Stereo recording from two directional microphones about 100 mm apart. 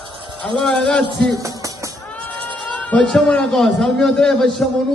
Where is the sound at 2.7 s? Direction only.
10° left (ahead or behind).